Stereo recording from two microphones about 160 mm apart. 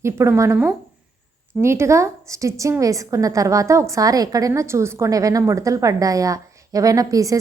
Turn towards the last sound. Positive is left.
turn(degrees=-20)  # may be behind; listen again after turning